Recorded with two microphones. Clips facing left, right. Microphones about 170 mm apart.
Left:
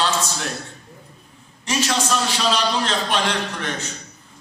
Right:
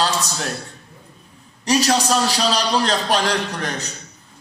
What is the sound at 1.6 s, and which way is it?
Music, 40° right (ahead or behind).